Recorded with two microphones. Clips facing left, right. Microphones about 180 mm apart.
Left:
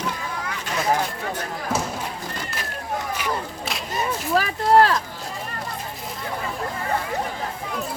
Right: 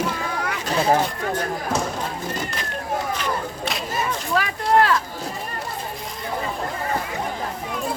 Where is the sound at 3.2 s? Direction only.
5° left (ahead or behind).